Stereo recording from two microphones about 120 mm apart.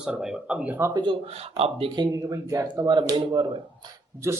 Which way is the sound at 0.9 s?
40° right (ahead or behind).